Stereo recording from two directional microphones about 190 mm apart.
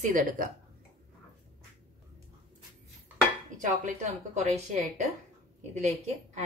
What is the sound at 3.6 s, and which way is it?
Speech, 40° right (ahead or behind).